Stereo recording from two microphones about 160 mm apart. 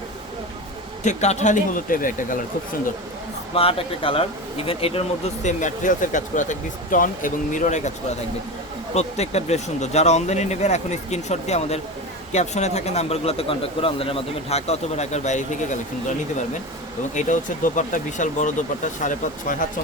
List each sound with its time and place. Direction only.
1.0 s speech: 45° left (ahead or behind)
3.5 s speech: 35° left (ahead or behind)
9.0 s speech: 40° left (ahead or behind)
17.2 s speech: 50° left (ahead or behind)